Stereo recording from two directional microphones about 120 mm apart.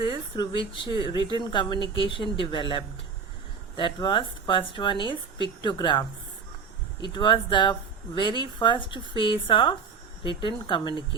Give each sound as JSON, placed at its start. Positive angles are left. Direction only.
{"t": 0.0, "sound": "speech", "side_deg": 45}